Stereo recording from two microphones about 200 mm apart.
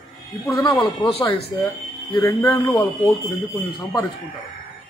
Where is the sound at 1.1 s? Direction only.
25° left (ahead or behind).